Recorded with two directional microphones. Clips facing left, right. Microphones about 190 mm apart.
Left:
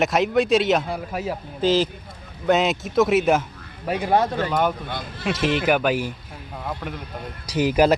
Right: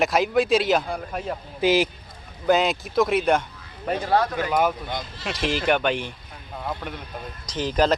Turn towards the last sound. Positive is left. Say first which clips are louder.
# left 4 dB
turn(degrees=10)  # may be behind; listen again after turning